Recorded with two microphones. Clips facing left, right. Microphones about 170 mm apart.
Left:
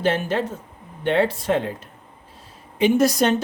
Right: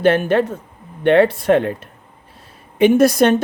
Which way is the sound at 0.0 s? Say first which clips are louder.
Right 7 dB; 60° right (ahead or behind).